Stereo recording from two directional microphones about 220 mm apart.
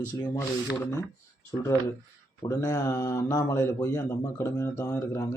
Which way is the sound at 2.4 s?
15° left (ahead or behind).